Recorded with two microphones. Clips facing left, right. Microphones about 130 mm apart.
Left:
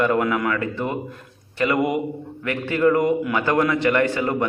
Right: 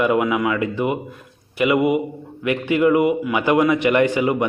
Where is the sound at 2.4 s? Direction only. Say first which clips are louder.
Right 2 dB; 15° right (ahead or behind).